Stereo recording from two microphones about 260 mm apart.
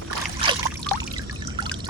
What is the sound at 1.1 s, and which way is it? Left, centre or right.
Pour, centre.